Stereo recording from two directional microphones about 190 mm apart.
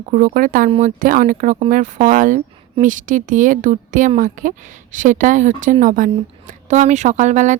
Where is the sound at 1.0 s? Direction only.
45° right (ahead or behind).